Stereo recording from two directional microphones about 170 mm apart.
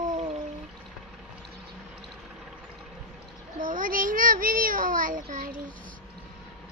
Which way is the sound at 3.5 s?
50° right (ahead or behind).